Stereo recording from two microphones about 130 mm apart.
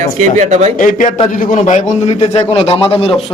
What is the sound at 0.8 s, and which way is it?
Speech, 90° left.